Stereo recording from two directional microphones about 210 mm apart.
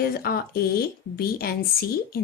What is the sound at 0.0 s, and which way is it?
Speech, 45° left (ahead or behind).